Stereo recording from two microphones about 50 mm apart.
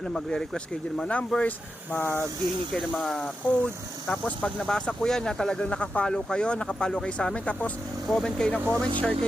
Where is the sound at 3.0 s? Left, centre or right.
Centre.